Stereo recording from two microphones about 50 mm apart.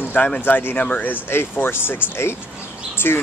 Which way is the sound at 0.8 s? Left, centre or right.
Left.